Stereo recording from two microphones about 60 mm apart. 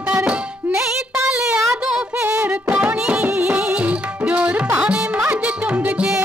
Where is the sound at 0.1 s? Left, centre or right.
Right.